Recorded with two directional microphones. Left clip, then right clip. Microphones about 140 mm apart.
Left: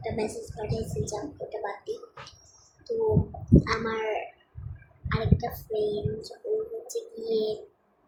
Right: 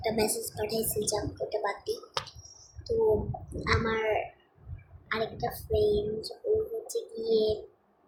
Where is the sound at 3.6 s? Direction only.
5° right (ahead or behind).